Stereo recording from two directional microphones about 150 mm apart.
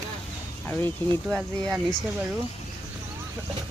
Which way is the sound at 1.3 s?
Centre (ahead or behind).